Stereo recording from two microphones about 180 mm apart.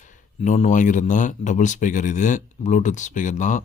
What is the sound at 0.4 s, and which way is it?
Speech, 40° left (ahead or behind).